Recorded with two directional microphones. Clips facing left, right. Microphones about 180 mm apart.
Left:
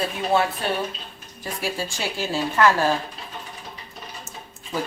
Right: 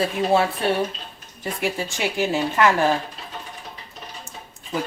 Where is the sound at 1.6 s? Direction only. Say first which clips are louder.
Right 3 dB; 20° right (ahead or behind).